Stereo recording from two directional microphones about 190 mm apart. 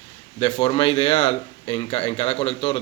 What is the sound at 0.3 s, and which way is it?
Speech, 30° left (ahead or behind).